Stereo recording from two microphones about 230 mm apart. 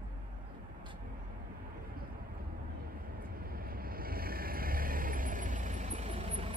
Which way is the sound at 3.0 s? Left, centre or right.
Right.